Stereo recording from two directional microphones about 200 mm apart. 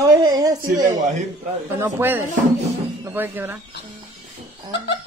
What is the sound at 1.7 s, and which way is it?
Speech, 10° right (ahead or behind).